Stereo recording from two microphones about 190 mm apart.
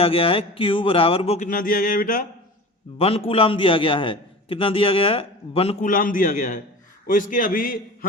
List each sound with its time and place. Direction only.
0.0 s a man's voice: 30° left (ahead or behind)
1.5 s a man's voice: 45° left (ahead or behind)
3.0 s a man's voice: 30° left (ahead or behind)
5.8 s a man's voice: 45° left (ahead or behind)